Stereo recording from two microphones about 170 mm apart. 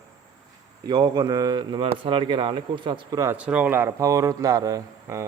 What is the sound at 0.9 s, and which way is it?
A man's voice, 25° right (ahead or behind).